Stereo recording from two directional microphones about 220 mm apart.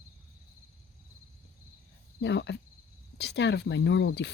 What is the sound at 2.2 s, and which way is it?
Speech, 50° left (ahead or behind).